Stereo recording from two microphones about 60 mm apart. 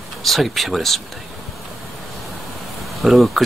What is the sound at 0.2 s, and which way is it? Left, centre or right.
Speech, centre.